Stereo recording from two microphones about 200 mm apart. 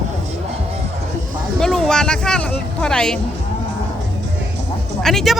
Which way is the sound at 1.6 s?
Centre (ahead or behind).